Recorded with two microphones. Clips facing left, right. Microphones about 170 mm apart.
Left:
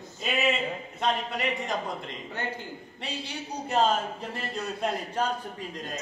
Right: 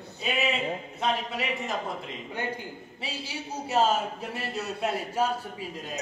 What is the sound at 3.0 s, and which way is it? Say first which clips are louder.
Speech: even; 5° right (ahead or behind).